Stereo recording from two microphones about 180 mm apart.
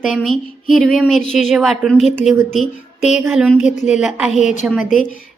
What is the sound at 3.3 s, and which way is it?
A woman's voice, centre (ahead or behind).